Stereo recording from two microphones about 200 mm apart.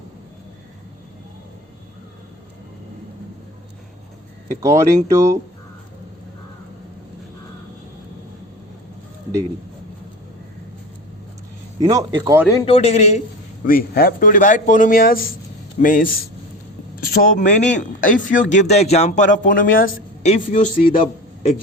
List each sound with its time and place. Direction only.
4.6 s speech: 15° right (ahead or behind)
11.8 s speech: 20° right (ahead or behind)
12.6 s speech: 30° left (ahead or behind)
13.7 s speech: 50° left (ahead or behind)
17.2 s speech: 40° left (ahead or behind)